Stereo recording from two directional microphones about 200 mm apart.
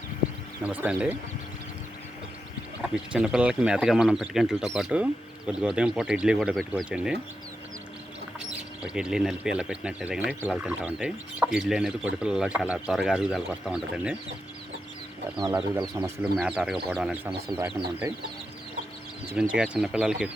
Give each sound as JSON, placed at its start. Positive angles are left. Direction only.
{"t": 0.6, "sound": "speech", "side_deg": -10}
{"t": 2.9, "sound": "speech", "side_deg": -5}
{"t": 8.4, "sound": "speech", "side_deg": -5}
{"t": 15.8, "sound": "speech", "side_deg": -25}
{"t": 16.4, "sound": "speech", "side_deg": -5}
{"t": 19.3, "sound": "speech", "side_deg": -5}